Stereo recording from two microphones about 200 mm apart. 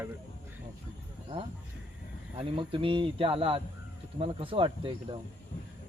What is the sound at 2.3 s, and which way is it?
Speech, 25° right (ahead or behind).